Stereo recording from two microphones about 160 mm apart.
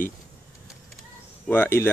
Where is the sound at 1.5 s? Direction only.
15° left (ahead or behind).